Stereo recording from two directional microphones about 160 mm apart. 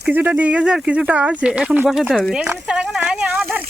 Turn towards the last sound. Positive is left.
turn(degrees=-10)  # may be behind; listen again after turning